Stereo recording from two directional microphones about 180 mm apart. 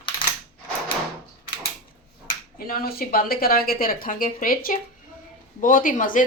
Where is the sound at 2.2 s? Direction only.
55° left (ahead or behind).